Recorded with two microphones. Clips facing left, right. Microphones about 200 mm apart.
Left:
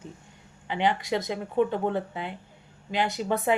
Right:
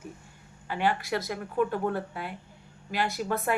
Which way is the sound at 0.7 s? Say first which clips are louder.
Left 2 dB; 20° left (ahead or behind).